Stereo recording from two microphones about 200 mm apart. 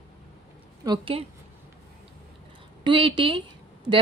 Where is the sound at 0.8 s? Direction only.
25° right (ahead or behind).